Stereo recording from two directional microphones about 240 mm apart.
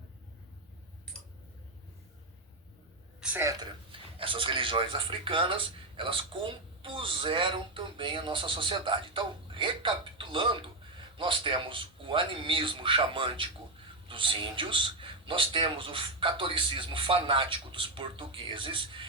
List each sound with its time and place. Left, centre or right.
3.2 s a man's voice: centre